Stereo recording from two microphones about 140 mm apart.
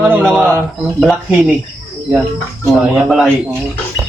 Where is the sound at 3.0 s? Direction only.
Centre (ahead or behind).